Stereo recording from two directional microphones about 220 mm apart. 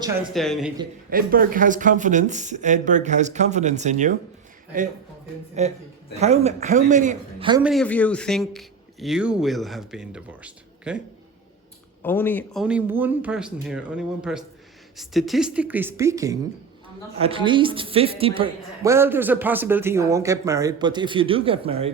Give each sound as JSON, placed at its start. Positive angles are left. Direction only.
{"t": 0.3, "sound": "a man's voice", "side_deg": 0}
{"t": 1.1, "sound": "speech", "side_deg": -40}
{"t": 5.6, "sound": "speech", "side_deg": -30}
{"t": 7.6, "sound": "a man's voice", "side_deg": 0}
{"t": 12.0, "sound": "speech", "side_deg": 10}
{"t": 12.6, "sound": "a man's voice", "side_deg": -5}
{"t": 17.2, "sound": "a woman's voice", "side_deg": -25}